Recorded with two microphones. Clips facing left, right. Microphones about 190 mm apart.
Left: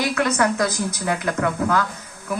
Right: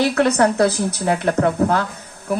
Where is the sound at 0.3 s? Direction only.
35° right (ahead or behind).